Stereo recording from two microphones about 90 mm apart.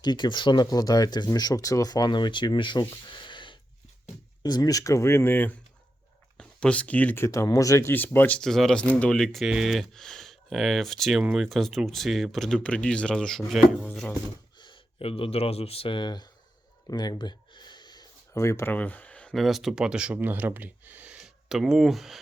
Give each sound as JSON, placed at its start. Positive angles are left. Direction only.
{"t": 0.0, "sound": "speech", "side_deg": 55}
{"t": 4.4, "sound": "speech", "side_deg": 45}
{"t": 6.3, "sound": "speech", "side_deg": 10}
{"t": 7.3, "sound": "speech", "side_deg": 40}
{"t": 7.9, "sound": "speech", "side_deg": 20}
{"t": 8.4, "sound": "speech", "side_deg": 5}
{"t": 11.2, "sound": "speech", "side_deg": -10}
{"t": 11.4, "sound": "speech", "side_deg": 0}
{"t": 14.6, "sound": "speech", "side_deg": 75}
{"t": 16.9, "sound": "a sound", "side_deg": 50}
{"t": 18.3, "sound": "speech", "side_deg": 35}
{"t": 18.7, "sound": "a sound", "side_deg": 20}
{"t": 19.3, "sound": "speech", "side_deg": 0}